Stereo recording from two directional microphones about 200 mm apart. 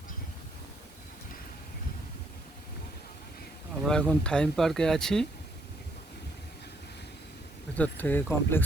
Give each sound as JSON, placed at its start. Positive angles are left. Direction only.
{"t": 3.8, "sound": "speech", "side_deg": 5}
{"t": 7.8, "sound": "speech", "side_deg": 10}